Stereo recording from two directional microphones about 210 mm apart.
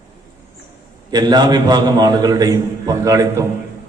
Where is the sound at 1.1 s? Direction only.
20° right (ahead or behind).